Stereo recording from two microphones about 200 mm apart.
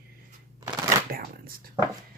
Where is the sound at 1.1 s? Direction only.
45° right (ahead or behind).